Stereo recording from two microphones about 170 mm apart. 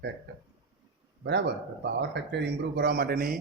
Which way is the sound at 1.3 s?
90° right.